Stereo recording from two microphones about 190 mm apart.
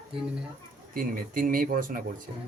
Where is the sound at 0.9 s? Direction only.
45° right (ahead or behind).